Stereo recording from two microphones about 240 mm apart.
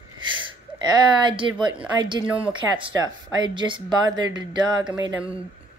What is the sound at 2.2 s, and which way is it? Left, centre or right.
Speech, centre.